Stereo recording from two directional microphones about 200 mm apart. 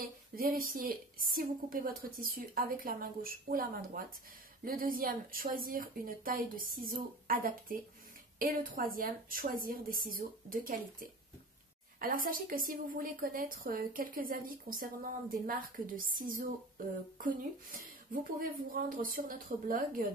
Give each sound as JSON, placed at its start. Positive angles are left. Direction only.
{"t": 0.4, "sound": "a woman's voice", "side_deg": -45}